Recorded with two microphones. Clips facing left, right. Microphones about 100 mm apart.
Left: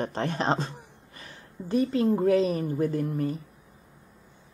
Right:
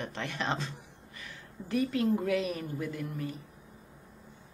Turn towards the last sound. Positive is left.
turn(degrees=40)  # may be behind; listen again after turning